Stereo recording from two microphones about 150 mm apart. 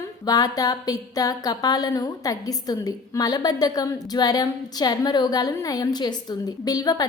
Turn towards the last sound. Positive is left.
turn(degrees=25)  # may be behind; listen again after turning